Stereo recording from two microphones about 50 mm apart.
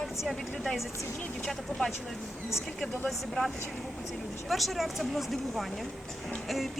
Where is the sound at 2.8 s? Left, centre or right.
Centre.